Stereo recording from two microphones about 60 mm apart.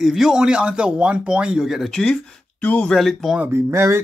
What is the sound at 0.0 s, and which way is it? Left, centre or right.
Speech, centre.